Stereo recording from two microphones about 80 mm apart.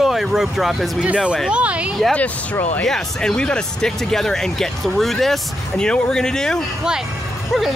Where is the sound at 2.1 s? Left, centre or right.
Centre.